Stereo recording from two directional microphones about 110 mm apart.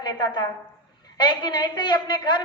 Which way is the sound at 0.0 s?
40° left (ahead or behind).